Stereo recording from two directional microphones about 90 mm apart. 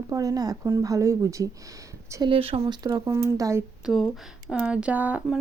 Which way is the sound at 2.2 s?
90° right.